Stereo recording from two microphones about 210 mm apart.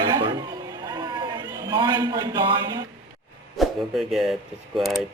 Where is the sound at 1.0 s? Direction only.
20° right (ahead or behind).